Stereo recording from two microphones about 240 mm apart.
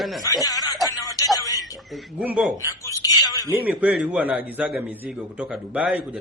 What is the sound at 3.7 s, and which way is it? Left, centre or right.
A man's voice, centre.